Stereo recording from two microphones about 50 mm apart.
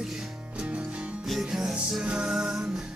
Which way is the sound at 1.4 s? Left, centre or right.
Centre.